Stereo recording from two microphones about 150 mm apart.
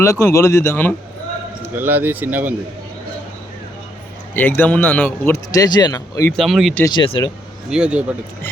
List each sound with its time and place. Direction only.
0.0 s a man's voice: 20° left (ahead or behind)
1.7 s speech: 15° right (ahead or behind)
4.4 s speech: 10° left (ahead or behind)
5.5 s a man's voice: 25° left (ahead or behind)
6.3 s speech: centre (ahead or behind)
6.8 s speech: 30° left (ahead or behind)
7.7 s speech: 5° right (ahead or behind)